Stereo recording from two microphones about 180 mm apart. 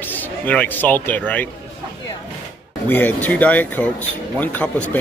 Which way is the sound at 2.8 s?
10° left (ahead or behind).